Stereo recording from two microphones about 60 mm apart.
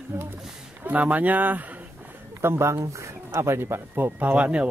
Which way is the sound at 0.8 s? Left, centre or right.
Right.